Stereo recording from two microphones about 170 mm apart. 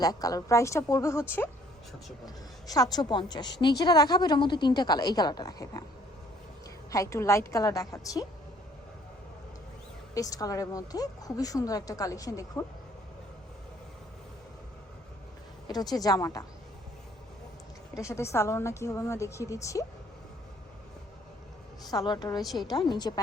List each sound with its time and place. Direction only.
0.0 s a woman's voice: 20° left (ahead or behind)
6.9 s a woman's voice: 20° left (ahead or behind)
10.2 s a woman's voice: 20° left (ahead or behind)
15.6 s a woman's voice: 25° left (ahead or behind)
17.9 s a woman's voice: 15° left (ahead or behind)
21.8 s a woman's voice: 25° left (ahead or behind)
22.4 s a woman's voice: centre (ahead or behind)
22.7 s a woman's voice: 25° left (ahead or behind)